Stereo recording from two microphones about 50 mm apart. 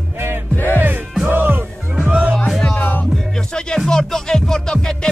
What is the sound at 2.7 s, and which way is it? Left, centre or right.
Music, left.